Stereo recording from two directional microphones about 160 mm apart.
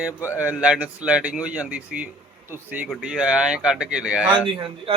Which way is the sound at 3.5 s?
5° right (ahead or behind).